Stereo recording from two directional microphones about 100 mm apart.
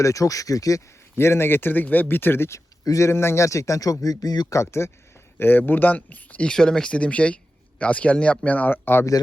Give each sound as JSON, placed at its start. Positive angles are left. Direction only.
{"t": 0.0, "sound": "a man's voice", "side_deg": 35}
{"t": 1.1, "sound": "a man's voice", "side_deg": 25}